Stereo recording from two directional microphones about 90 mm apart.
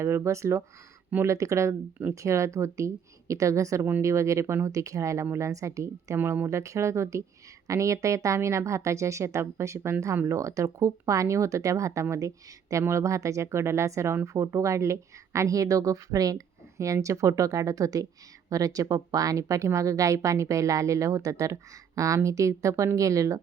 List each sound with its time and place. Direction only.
0.0 s a woman's voice: 30° right (ahead or behind)
6.1 s a woman's voice: 25° right (ahead or behind)